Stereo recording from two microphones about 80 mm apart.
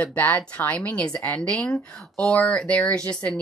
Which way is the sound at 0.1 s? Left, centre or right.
Left.